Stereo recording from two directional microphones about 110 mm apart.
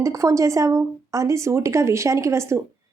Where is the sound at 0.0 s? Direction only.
30° right (ahead or behind).